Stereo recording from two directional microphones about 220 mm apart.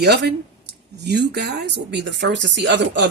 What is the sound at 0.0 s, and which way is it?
Speech, 45° right (ahead or behind).